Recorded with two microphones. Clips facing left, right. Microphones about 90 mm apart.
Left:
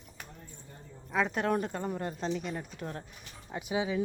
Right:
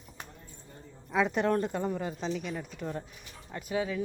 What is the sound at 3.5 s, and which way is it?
Speech, 15° left (ahead or behind).